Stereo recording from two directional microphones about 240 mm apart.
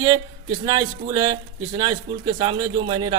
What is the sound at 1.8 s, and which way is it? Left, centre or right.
A man's voice, centre.